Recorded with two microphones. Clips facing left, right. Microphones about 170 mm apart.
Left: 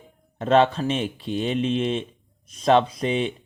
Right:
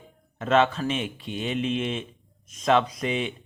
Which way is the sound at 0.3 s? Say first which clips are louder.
Left 3 dB; 35° left (ahead or behind).